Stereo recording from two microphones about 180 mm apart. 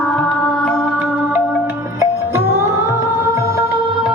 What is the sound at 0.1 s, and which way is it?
Music, 5° left (ahead or behind).